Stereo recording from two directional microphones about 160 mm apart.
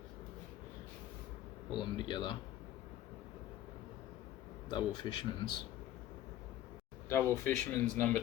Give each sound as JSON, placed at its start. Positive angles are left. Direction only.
{"t": 1.7, "sound": "speech", "side_deg": 30}
{"t": 4.7, "sound": "speech", "side_deg": 30}
{"t": 7.1, "sound": "speech", "side_deg": 15}